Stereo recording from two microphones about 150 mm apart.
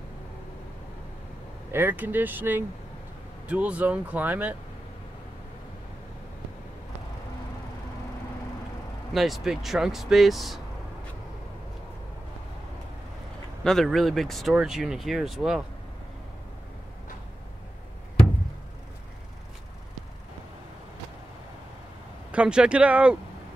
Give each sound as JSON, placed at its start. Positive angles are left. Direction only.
{"t": 1.7, "sound": "speech", "side_deg": -15}
{"t": 9.1, "sound": "speech", "side_deg": 0}
{"t": 13.7, "sound": "speech", "side_deg": 0}
{"t": 22.3, "sound": "speech", "side_deg": -5}